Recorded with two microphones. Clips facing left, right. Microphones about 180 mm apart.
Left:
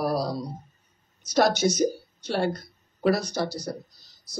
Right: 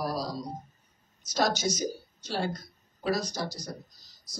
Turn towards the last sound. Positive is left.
turn(degrees=65)  # may be behind; listen again after turning